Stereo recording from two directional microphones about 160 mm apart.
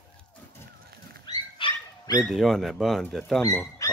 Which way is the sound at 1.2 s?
30° left (ahead or behind).